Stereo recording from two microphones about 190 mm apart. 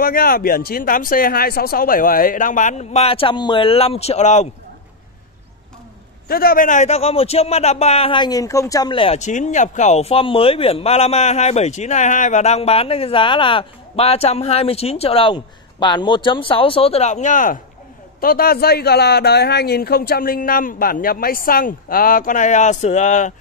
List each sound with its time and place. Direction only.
0.0 s a man's voice: 50° left (ahead or behind)
6.2 s a man's voice: 50° left (ahead or behind)